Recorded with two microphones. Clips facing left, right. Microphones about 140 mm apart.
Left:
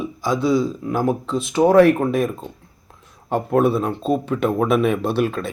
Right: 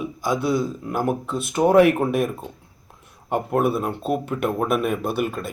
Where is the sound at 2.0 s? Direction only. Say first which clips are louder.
Left 2 dB; 5° right (ahead or behind).